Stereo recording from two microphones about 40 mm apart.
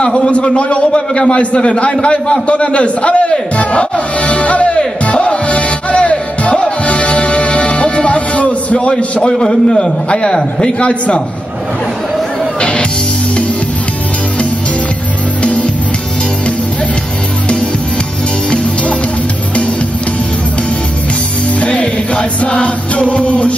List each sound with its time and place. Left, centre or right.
0.0 s a man's voice: left
6.9 s music: left
9.4 s a man's voice: centre
12.5 s music: left
18.5 s music: left
21.5 s music: left